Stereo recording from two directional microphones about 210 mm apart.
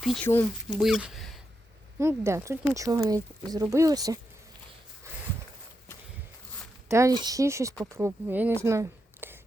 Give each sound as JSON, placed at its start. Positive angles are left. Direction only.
{"t": 0.0, "sound": "speech", "side_deg": 0}
{"t": 2.0, "sound": "speech", "side_deg": -15}
{"t": 6.8, "sound": "speech", "side_deg": -15}
{"t": 8.6, "sound": "a sound", "side_deg": -15}